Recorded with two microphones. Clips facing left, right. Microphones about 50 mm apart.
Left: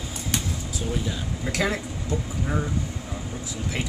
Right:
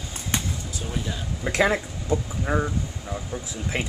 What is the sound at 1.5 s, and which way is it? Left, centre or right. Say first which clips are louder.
Speech: right 5 dB; right.